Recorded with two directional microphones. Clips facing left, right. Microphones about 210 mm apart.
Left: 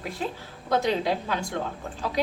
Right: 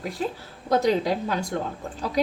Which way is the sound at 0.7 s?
40° right (ahead or behind).